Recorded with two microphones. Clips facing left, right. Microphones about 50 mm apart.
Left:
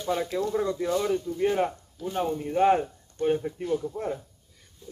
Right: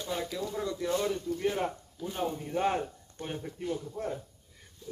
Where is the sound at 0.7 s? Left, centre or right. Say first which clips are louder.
Left 5 dB; left.